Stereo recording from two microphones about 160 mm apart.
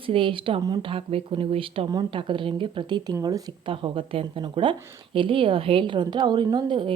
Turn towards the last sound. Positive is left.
turn(degrees=-30)  # may be behind; listen again after turning